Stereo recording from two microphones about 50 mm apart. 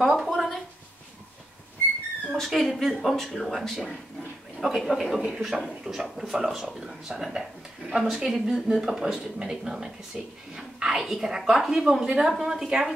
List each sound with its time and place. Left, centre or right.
0.0 s a sound: centre
2.3 s a man's voice: centre
5.9 s a man's voice: right
6.4 s speech: centre